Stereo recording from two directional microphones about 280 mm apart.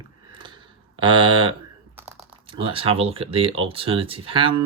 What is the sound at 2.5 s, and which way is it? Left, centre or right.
Speech, centre.